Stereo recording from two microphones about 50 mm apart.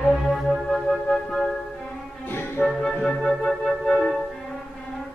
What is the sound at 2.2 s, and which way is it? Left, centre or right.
Music, left.